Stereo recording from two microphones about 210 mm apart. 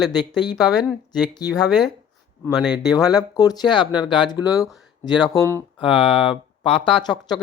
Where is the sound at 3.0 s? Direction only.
20° left (ahead or behind).